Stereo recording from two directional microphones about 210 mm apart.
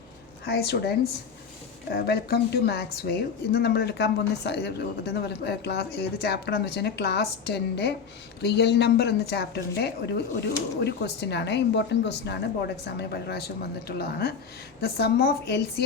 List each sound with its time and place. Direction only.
0.4 s a woman's voice: 50° left (ahead or behind)